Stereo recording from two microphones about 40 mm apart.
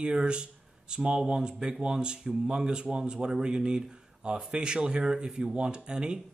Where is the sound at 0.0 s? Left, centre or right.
Right.